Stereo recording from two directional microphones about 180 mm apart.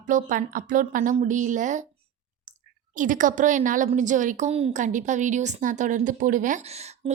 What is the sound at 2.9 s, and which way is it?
A woman's voice, 45° right (ahead or behind).